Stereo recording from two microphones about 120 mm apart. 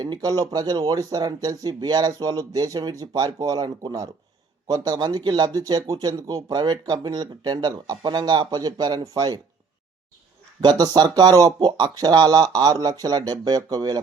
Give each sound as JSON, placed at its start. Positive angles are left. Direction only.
{"t": 0.0, "sound": "speech", "side_deg": -35}
{"t": 10.6, "sound": "speech", "side_deg": -35}